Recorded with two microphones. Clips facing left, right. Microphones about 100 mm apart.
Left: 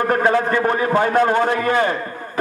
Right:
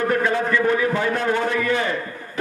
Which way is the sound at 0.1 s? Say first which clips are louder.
Left 3 dB; 45° left (ahead or behind).